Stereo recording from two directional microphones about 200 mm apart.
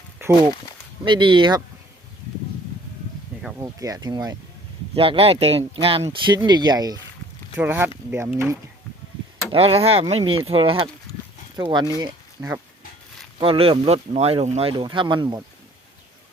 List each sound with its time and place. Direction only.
1.0 s speech: 25° right (ahead or behind)
3.6 s speech: 15° right (ahead or behind)
9.5 s speech: 30° right (ahead or behind)